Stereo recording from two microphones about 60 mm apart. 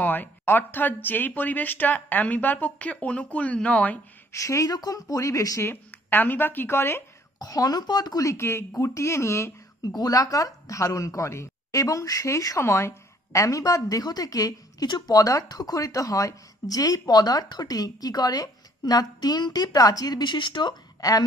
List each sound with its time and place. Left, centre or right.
0.0 s speech: left
4.3 s a woman's voice: left
5.1 s a woman's voice: left
6.0 s a woman's voice: left
7.4 s speech: left
9.8 s a woman's voice: left
12.6 s a woman's voice: left